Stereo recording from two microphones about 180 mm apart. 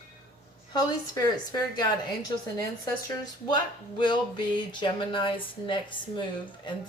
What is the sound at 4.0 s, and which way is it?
Speech, 25° left (ahead or behind).